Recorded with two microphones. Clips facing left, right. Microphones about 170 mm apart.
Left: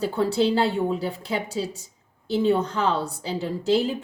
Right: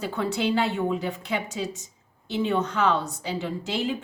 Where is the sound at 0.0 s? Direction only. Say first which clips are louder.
Left 5 dB; 35° left (ahead or behind).